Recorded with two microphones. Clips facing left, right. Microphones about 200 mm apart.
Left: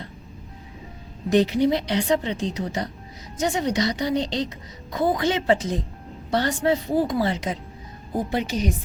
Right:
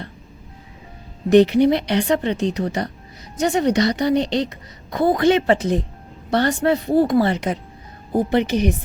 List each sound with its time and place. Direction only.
1.3 s a woman's voice: 65° right (ahead or behind)